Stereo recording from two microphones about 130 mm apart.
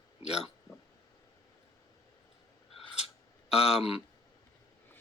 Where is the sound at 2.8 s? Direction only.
50° left (ahead or behind).